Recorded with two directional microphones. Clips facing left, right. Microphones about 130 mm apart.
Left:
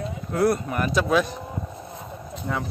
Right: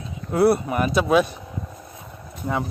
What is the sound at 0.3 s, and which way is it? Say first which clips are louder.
Speech: right 4 dB; 10° right (ahead or behind).